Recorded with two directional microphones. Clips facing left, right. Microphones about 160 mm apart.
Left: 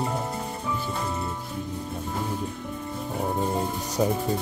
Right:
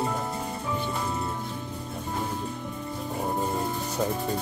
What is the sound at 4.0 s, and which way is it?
Speech, 15° left (ahead or behind).